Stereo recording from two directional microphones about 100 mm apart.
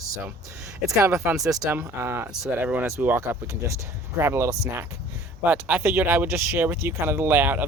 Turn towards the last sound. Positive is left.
turn(degrees=-20)  # may be behind; listen again after turning